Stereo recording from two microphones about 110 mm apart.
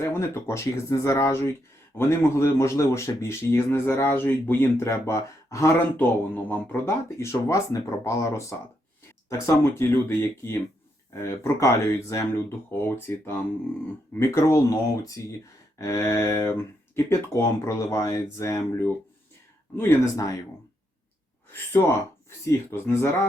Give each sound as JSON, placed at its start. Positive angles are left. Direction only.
{"t": 0.0, "sound": "speech", "side_deg": 25}
{"t": 21.5, "sound": "speech", "side_deg": 20}